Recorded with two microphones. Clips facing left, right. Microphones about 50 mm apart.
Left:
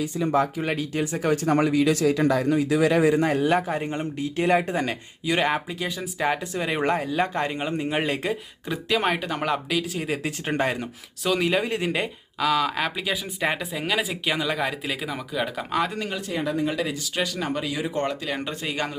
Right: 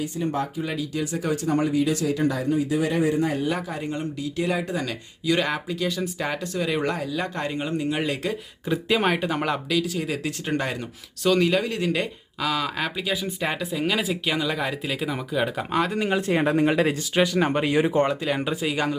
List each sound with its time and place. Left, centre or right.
0.5 s speech: left
1.5 s speech: left
3.2 s a man's voice: left
3.7 s speech: left
5.2 s speech: left
8.3 s speech: centre
9.6 s speech: centre
11.2 s speech: centre
12.4 s speech: centre
16.0 s speech: right
16.4 s speech: right
17.2 s speech: right
18.1 s speech: centre